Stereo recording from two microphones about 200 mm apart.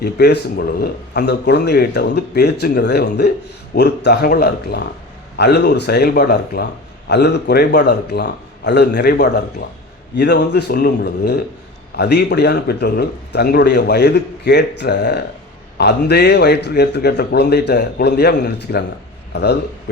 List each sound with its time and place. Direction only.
0.0 s a man's voice: 55° left (ahead or behind)